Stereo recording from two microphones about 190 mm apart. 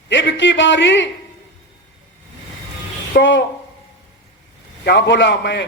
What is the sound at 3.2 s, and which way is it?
Speech, 75° left (ahead or behind).